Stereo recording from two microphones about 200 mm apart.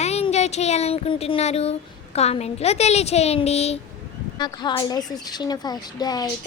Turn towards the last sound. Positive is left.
turn(degrees=20)  # may be behind; listen again after turning